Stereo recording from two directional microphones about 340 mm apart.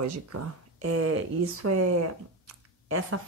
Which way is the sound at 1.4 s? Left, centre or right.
Right.